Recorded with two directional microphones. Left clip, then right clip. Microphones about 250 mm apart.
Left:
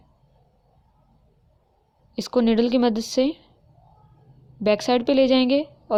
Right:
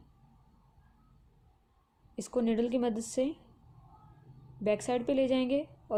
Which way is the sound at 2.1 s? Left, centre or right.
Left.